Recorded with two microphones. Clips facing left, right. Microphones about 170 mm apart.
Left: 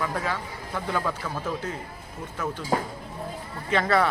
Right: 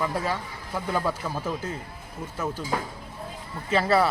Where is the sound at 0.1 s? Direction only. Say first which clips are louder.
Right 1 dB; 10° right (ahead or behind).